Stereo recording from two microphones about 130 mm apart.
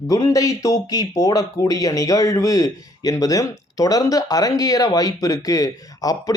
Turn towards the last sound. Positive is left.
turn(degrees=25)  # may be behind; listen again after turning